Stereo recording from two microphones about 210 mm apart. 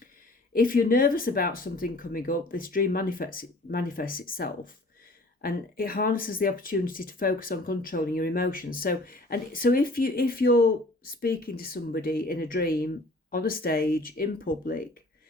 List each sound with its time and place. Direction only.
0.5 s speech: 40° left (ahead or behind)